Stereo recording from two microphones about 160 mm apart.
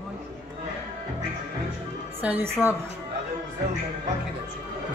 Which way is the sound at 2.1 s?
10° right (ahead or behind).